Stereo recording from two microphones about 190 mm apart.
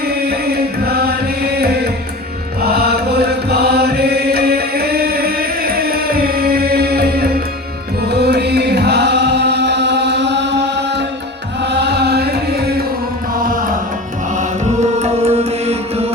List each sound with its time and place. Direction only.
0.9 s chant: 55° right (ahead or behind)
2.6 s mantra: 55° right (ahead or behind)
8.0 s chant: 60° right (ahead or behind)
11.6 s chant: 60° right (ahead or behind)
13.4 s music: 45° right (ahead or behind)